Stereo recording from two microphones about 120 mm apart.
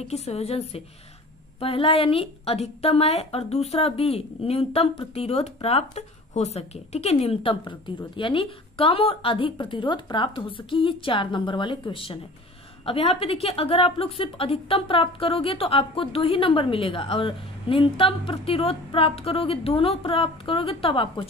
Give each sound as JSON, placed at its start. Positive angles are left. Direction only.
{"t": 0.1, "sound": "a woman's voice", "side_deg": 65}
{"t": 7.6, "sound": "speech", "side_deg": 40}